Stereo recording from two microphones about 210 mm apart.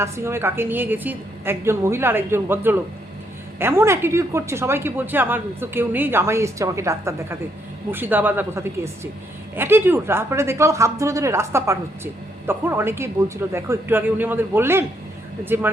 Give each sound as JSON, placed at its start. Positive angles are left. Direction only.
{"t": 0.0, "sound": "a woman's voice", "side_deg": -10}